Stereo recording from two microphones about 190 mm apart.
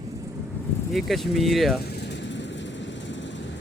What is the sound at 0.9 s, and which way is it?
Speech, centre (ahead or behind).